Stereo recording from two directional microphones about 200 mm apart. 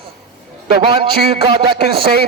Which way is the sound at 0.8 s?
25° right (ahead or behind).